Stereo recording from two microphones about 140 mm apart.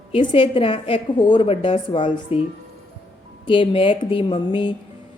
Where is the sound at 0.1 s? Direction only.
40° left (ahead or behind).